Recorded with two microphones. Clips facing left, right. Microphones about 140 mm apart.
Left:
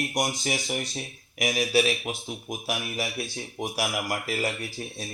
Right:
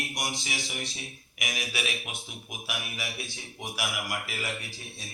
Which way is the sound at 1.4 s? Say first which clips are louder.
Left 11 dB; 35° left (ahead or behind).